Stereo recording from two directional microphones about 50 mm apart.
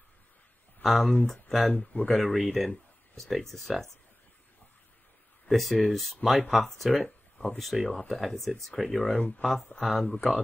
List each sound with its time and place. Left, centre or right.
0.8 s speech: centre
1.7 s speech: left
2.0 s speech: centre
5.5 s speech: centre